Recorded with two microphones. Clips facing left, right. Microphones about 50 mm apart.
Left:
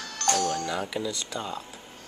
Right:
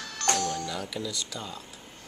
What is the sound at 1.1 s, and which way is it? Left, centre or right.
Speech, left.